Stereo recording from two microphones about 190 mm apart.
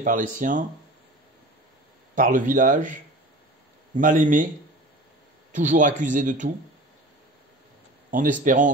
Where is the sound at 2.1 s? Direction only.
45° right (ahead or behind).